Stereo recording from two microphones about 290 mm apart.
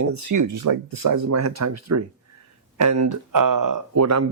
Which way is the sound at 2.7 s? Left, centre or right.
Right.